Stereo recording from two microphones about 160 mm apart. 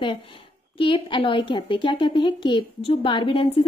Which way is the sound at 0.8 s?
30° left (ahead or behind).